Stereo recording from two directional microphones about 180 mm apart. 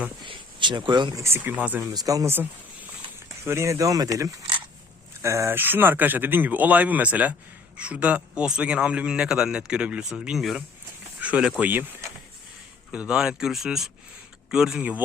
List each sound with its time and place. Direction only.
0.3 s a man's voice: 25° right (ahead or behind); by 11.9 s 10° right (ahead or behind)
12.9 s a man's voice: 5° right (ahead or behind)